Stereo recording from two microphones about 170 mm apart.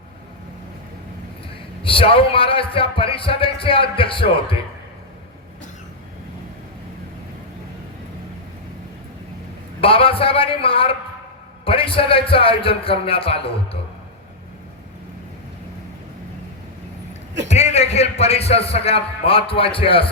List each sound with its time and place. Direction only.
1.8 s a man's voice: 30° left (ahead or behind)
9.8 s a man's voice: 35° left (ahead or behind)
17.5 s a man's voice: 40° left (ahead or behind)